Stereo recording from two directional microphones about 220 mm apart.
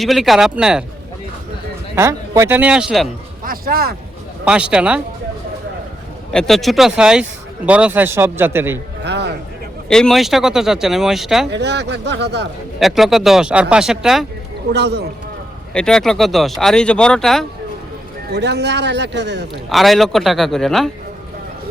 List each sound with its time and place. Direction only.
0.0 s speech: centre (ahead or behind)
2.0 s speech: 15° right (ahead or behind)
3.4 s speech: 40° right (ahead or behind)
4.4 s speech: 5° right (ahead or behind)
6.3 s speech: centre (ahead or behind)
9.0 s music: 50° right (ahead or behind)
9.9 s speech: centre (ahead or behind)
11.5 s speech: 50° right (ahead or behind)
12.8 s speech: centre (ahead or behind)
14.7 s speech: 50° right (ahead or behind)
15.7 s speech: 5° left (ahead or behind)
18.3 s speech: 50° right (ahead or behind)
19.7 s speech: centre (ahead or behind)